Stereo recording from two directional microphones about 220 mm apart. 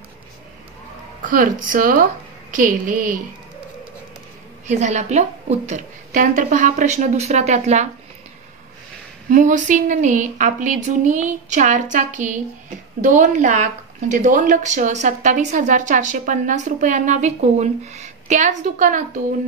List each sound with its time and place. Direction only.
1.2 s a woman's voice: 35° right (ahead or behind)
4.6 s a woman's voice: 30° right (ahead or behind)
9.3 s a woman's voice: 35° right (ahead or behind)